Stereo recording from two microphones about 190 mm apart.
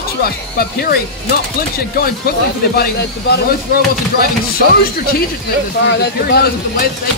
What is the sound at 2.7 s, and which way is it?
Speech, 55° left (ahead or behind).